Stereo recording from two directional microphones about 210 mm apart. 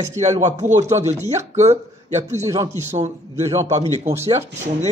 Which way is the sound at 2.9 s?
35° right (ahead or behind).